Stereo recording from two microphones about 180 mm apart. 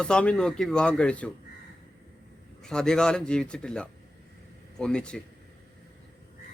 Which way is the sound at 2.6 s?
5° left (ahead or behind).